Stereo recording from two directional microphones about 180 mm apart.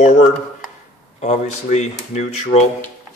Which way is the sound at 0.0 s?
45° left (ahead or behind).